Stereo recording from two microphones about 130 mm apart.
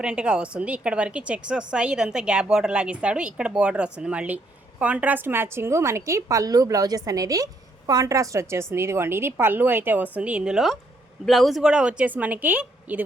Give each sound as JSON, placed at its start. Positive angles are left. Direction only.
{"t": 0.0, "sound": "a woman's voice", "side_deg": -5}